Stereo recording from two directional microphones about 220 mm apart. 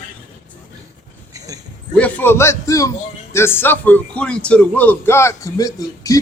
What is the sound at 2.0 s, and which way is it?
A man's voice, 5° left (ahead or behind).